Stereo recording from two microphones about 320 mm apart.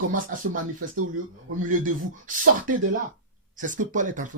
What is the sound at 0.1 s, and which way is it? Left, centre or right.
Speech, right.